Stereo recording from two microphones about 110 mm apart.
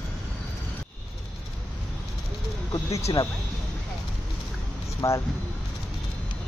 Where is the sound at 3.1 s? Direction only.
40° left (ahead or behind).